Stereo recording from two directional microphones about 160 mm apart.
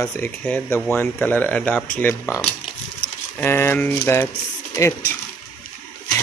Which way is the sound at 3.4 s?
15° left (ahead or behind).